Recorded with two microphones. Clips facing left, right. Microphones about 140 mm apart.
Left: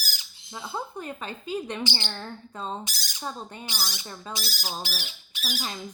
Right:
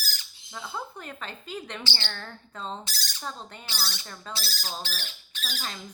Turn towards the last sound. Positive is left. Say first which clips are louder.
# left 4 dB
turn(degrees=10)  # may be behind; listen again after turning